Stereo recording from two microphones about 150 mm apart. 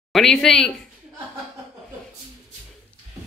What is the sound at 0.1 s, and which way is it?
Speech, 5° left (ahead or behind).